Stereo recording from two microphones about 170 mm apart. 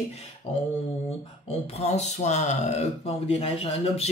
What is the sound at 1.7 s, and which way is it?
Speech, 40° left (ahead or behind).